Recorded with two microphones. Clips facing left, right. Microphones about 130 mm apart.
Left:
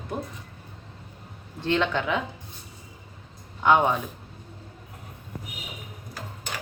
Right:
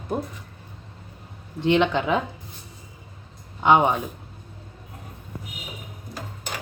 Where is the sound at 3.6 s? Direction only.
20° right (ahead or behind).